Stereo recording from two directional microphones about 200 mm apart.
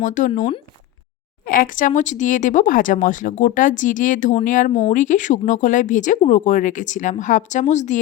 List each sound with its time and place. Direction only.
0.0 s speech: 40° left (ahead or behind)
1.5 s speech: 45° left (ahead or behind)